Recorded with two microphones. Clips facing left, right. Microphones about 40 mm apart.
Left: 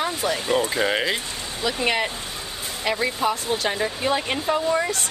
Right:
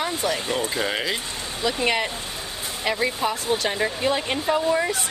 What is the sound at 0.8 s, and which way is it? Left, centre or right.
Speech, centre.